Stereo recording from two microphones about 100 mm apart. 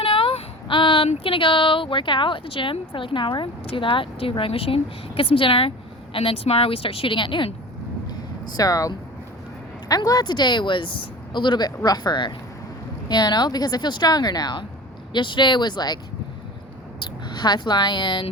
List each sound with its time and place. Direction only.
0.0 s speech: 65° left (ahead or behind)
8.5 s speech: 35° left (ahead or behind)
9.9 s speech: 40° left (ahead or behind)
17.0 s speech: 45° left (ahead or behind)